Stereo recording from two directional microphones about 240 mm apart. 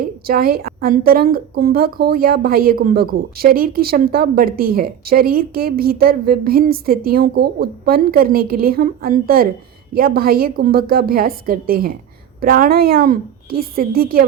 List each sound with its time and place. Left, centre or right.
0.0 s a woman's voice: right